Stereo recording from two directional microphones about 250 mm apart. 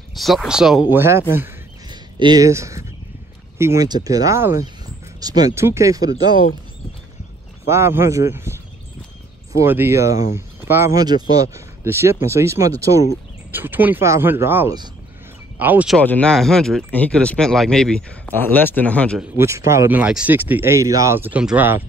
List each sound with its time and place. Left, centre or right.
0.1 s speech: centre
1.3 s a sound: centre
3.5 s speech: centre
7.6 s speech: centre
9.6 s speech: centre
16.0 s speech: centre
19.3 s speech: centre